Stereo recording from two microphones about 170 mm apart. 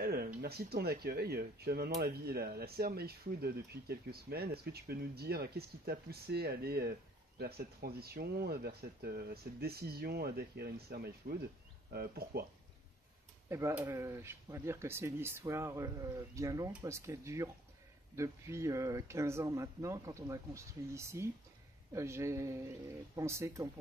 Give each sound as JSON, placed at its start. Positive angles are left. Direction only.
{"t": 0.0, "sound": "speech", "side_deg": -65}
{"t": 13.5, "sound": "speech", "side_deg": -15}